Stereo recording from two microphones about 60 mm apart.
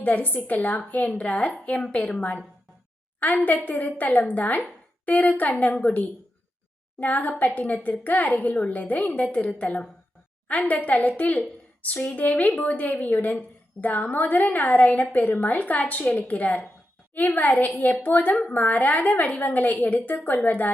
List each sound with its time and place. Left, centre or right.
0.0 s a woman's voice: left
3.2 s a woman's voice: left